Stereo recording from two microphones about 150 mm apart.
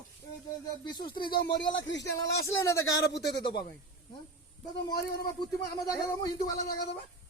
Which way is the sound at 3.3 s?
30° left (ahead or behind).